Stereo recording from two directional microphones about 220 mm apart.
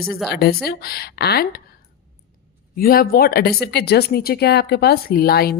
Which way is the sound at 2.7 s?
45° left (ahead or behind).